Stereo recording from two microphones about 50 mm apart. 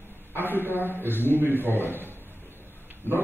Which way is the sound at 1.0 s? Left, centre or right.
Right.